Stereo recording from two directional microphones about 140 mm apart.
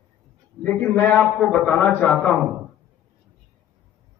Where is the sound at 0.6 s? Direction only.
10° left (ahead or behind).